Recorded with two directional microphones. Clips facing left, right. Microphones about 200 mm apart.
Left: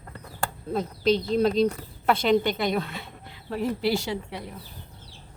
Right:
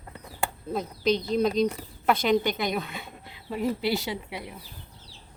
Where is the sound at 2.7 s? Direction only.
10° right (ahead or behind).